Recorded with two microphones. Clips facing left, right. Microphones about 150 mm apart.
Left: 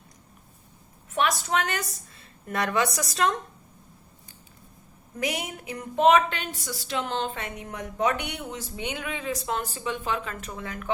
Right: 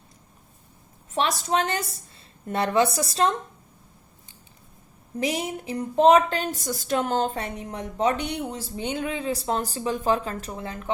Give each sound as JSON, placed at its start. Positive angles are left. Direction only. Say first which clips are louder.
{"t": 1.1, "sound": "a woman's voice", "louder": "right 1 dB", "side_deg": -30}
{"t": 5.2, "sound": "a woman's voice", "louder": "right 3 dB", "side_deg": -30}